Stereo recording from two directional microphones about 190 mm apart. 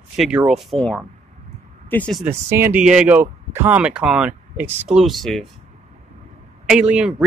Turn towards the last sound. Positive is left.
turn(degrees=-5)  # may be behind; listen again after turning